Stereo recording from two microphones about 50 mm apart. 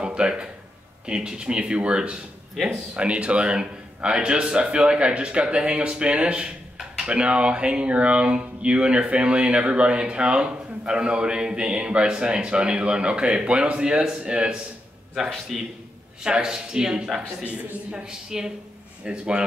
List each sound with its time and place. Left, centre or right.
0.0 s speech: centre
15.5 s a man's voice: centre
16.2 s speech: centre
17.5 s speech: right
18.0 s speech: centre